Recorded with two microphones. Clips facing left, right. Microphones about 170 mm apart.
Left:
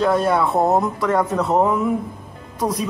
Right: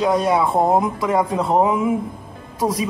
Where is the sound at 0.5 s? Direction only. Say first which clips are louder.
Even; 10° right (ahead or behind).